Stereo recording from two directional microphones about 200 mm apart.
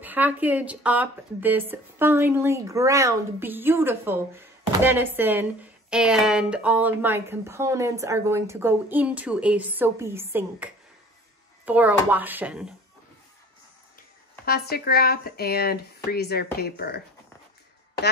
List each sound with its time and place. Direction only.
0.0 s speech: 10° right (ahead or behind)
14.4 s speech: 50° left (ahead or behind)